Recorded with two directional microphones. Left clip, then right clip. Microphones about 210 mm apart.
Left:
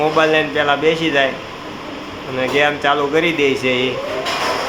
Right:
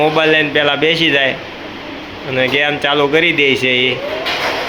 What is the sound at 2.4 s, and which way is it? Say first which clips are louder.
Speech: right 1 dB; 25° right (ahead or behind).